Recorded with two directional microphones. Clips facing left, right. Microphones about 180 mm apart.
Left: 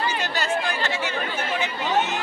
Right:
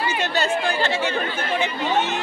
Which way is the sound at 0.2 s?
25° right (ahead or behind).